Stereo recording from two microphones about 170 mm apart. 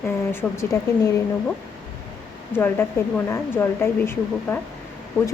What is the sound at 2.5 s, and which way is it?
A woman's voice, 10° left (ahead or behind).